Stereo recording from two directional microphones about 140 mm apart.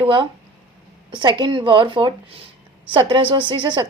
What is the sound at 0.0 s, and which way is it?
A woman's voice, 35° right (ahead or behind).